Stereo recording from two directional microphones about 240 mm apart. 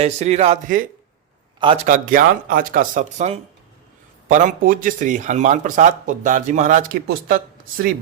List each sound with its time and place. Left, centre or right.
0.0 s a man's voice: right